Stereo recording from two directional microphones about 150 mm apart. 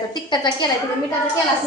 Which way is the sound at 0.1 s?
30° left (ahead or behind).